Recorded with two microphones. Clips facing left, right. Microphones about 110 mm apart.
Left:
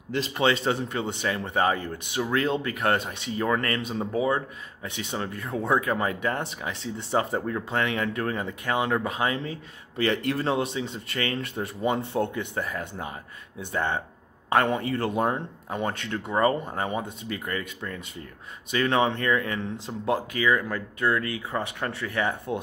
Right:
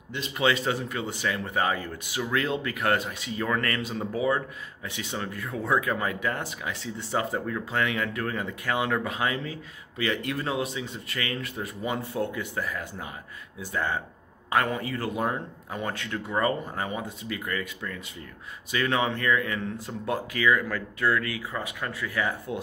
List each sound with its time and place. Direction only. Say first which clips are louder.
0.1 s speech: left 2 dB; 30° left (ahead or behind)